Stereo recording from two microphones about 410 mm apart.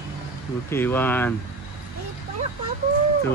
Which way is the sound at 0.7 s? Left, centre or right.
Centre.